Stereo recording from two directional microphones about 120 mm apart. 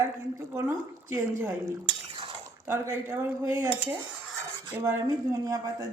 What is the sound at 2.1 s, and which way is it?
Cutlery, 50° right (ahead or behind).